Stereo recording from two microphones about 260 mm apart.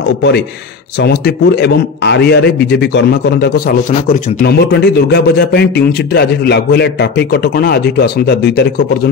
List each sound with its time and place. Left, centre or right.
0.9 s a man's voice: left